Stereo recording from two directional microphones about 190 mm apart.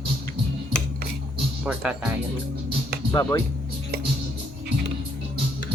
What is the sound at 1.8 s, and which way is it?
Speech, 5° right (ahead or behind).